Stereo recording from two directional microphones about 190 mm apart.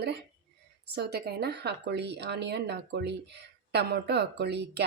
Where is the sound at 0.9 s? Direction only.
60° right (ahead or behind).